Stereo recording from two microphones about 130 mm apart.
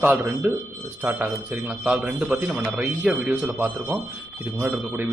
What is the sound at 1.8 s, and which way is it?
A man's voice, 5° right (ahead or behind).